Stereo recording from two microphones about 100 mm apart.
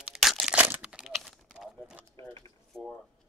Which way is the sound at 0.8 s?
5° right (ahead or behind).